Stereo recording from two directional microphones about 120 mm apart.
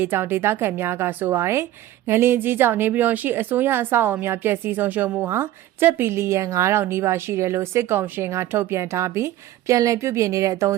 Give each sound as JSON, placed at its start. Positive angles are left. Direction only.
{"t": 0.0, "sound": "a woman's voice", "side_deg": -20}